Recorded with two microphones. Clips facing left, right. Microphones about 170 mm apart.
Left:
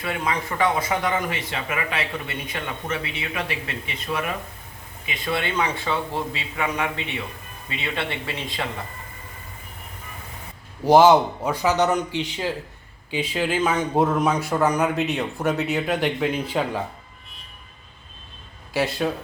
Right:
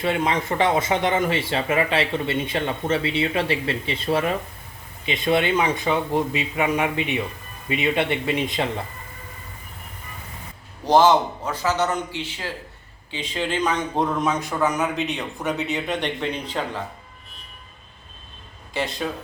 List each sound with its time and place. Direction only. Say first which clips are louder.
0.0 s a man's voice: right 4 dB; 25° right (ahead or behind)
10.8 s a man's voice: left 2 dB; 10° left (ahead or behind)
18.7 s a man's voice: left 3 dB; 5° left (ahead or behind)